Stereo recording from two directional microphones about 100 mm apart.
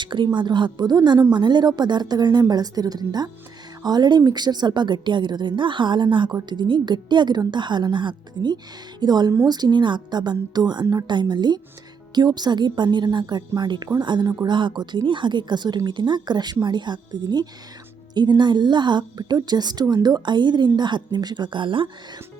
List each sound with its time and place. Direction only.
0.0 s speech: 50° right (ahead or behind)